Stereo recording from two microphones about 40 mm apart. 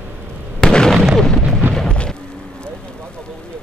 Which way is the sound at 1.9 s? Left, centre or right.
Left.